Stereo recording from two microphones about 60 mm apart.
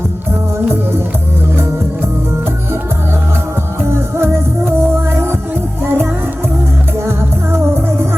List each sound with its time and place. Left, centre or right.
4.2 s music: right
5.8 s music: right